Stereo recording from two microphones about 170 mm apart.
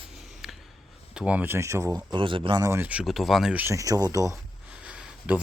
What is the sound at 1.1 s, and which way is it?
Speech, 5° right (ahead or behind).